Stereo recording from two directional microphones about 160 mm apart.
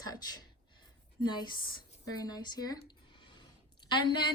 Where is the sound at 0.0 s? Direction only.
25° left (ahead or behind).